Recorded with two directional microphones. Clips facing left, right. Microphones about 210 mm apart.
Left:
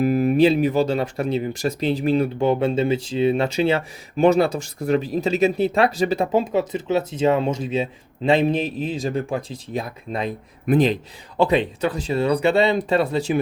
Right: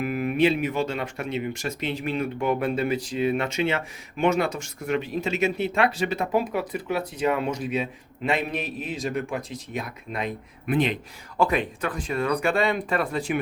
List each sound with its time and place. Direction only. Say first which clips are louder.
0.0 s speech: left 6 dB; 35° left (ahead or behind)
11.3 s speech: left 5 dB; 25° left (ahead or behind)